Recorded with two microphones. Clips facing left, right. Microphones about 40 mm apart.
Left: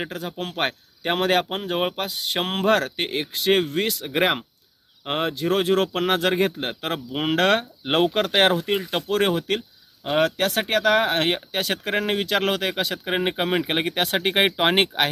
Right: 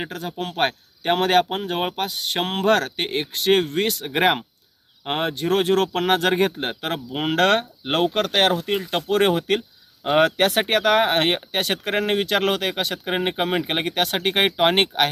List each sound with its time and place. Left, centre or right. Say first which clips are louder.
0.0 s speech: right 1 dB; centre
10.3 s speech: right 3 dB; right; by 15.1 s centre